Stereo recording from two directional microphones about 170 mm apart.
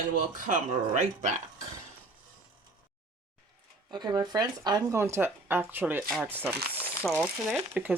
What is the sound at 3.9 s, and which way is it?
Speech, 25° right (ahead or behind).